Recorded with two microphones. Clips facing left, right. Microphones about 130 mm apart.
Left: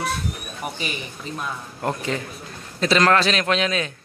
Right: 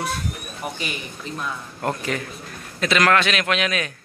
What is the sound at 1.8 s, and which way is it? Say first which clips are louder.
A man's voice: even; 20° left (ahead or behind).